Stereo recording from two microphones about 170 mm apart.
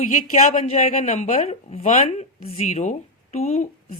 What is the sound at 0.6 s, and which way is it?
Speech, 40° left (ahead or behind).